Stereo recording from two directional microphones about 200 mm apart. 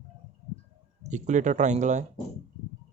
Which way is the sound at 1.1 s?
35° right (ahead or behind).